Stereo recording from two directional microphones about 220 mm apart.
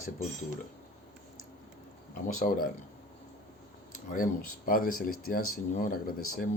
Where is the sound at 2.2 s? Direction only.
40° left (ahead or behind).